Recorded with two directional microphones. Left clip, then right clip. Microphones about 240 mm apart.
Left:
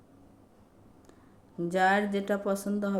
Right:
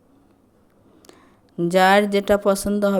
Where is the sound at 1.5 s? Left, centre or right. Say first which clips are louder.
Right 10 dB; right.